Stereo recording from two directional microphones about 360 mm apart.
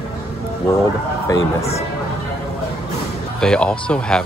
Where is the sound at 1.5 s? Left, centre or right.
Centre.